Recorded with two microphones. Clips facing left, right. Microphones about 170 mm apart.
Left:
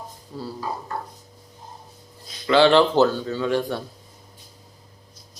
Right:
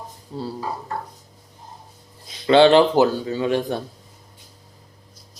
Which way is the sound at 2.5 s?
25° right (ahead or behind).